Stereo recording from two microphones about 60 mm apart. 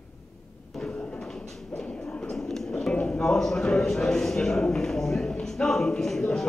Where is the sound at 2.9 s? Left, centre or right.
Centre.